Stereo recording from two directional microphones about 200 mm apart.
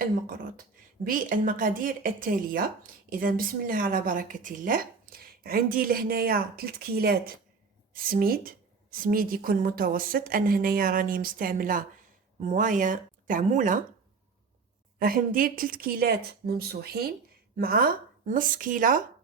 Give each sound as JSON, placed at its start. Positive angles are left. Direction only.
{"t": 0.0, "sound": "a woman's voice", "side_deg": -45}
{"t": 14.9, "sound": "a woman's voice", "side_deg": -45}